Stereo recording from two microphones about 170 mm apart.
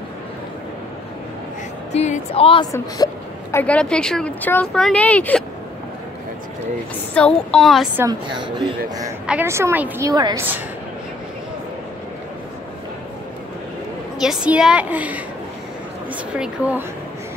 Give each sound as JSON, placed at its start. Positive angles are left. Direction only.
{"t": 1.9, "sound": "speech", "side_deg": 40}
{"t": 3.5, "sound": "speech", "side_deg": 5}
{"t": 7.2, "sound": "speech", "side_deg": 5}
{"t": 8.0, "sound": "speech", "side_deg": -25}
{"t": 9.2, "sound": "a woman's voice", "side_deg": -10}
{"t": 10.1, "sound": "speech", "side_deg": -25}
{"t": 14.2, "sound": "a woman's voice", "side_deg": -5}
{"t": 16.3, "sound": "a woman's voice", "side_deg": -10}